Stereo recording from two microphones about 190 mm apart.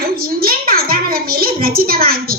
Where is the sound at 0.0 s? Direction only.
50° right (ahead or behind).